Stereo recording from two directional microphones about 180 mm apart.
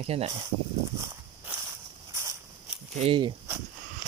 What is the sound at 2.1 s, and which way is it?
Walk, 15° right (ahead or behind).